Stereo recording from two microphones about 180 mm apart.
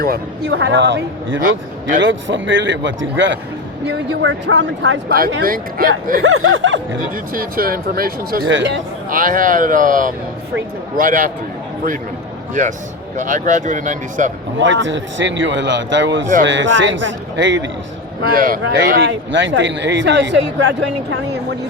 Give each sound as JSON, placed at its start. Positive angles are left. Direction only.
{"t": 0.0, "sound": "a man's voice", "side_deg": -60}
{"t": 3.8, "sound": "a man's voice", "side_deg": -80}
{"t": 5.0, "sound": "speech", "side_deg": -55}
{"t": 6.2, "sound": "a man's voice", "side_deg": -90}
{"t": 7.3, "sound": "speech", "side_deg": -55}
{"t": 9.0, "sound": "speech", "side_deg": -50}
{"t": 12.6, "sound": "speech", "side_deg": -45}
{"t": 14.6, "sound": "a man's voice", "side_deg": -90}
{"t": 18.3, "sound": "speech", "side_deg": -50}
{"t": 18.9, "sound": "speech", "side_deg": -90}